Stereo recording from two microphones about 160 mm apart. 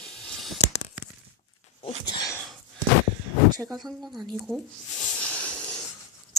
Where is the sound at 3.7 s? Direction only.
Centre (ahead or behind).